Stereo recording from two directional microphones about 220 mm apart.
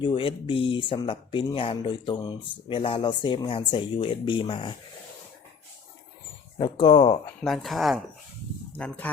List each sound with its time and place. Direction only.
0.0 s speech: 25° left (ahead or behind)
6.6 s speech: 20° left (ahead or behind)
7.4 s speech: centre (ahead or behind)